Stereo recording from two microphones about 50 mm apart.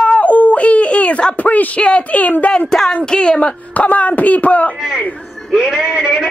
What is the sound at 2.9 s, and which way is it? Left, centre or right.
A man's voice, centre.